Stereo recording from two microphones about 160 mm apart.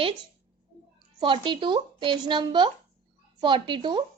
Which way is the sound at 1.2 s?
30° right (ahead or behind).